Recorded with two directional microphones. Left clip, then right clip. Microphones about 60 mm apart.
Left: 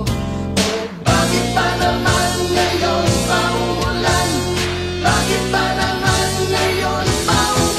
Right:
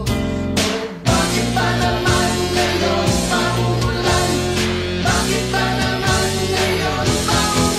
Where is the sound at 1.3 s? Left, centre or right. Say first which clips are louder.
Left 2 dB; right.